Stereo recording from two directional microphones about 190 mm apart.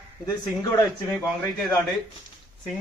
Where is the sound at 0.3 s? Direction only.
15° left (ahead or behind).